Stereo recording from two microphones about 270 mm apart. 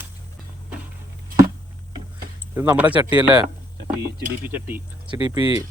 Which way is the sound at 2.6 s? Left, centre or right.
Centre.